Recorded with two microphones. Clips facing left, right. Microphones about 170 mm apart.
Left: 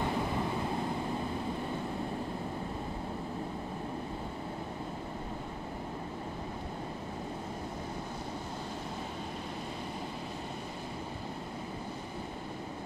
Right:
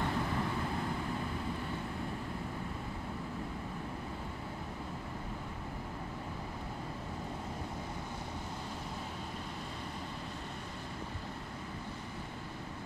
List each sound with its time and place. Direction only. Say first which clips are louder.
0.0 s vehicle: left 2 dB; 20° left (ahead or behind)